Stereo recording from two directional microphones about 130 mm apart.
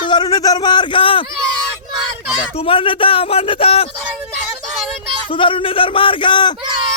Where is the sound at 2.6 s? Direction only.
45° left (ahead or behind).